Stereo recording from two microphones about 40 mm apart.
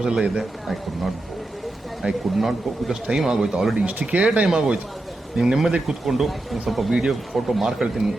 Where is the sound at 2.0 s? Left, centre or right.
Right.